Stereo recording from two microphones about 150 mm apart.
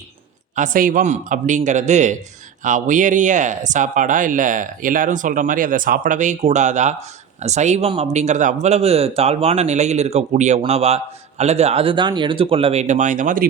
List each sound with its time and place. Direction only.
0.5 s speech: 60° right (ahead or behind)